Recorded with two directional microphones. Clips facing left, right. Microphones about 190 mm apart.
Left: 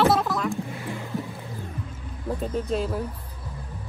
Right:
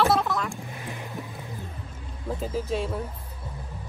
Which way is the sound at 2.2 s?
Centre (ahead or behind).